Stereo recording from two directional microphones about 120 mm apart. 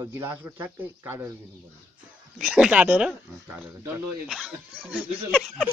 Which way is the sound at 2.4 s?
5° right (ahead or behind).